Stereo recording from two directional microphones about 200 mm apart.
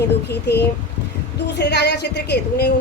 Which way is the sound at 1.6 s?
55° left (ahead or behind).